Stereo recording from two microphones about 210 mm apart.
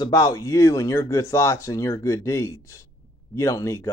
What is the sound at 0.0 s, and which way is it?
Speech, 20° left (ahead or behind).